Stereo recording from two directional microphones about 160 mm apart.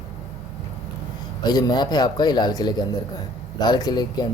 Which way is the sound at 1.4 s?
25° left (ahead or behind).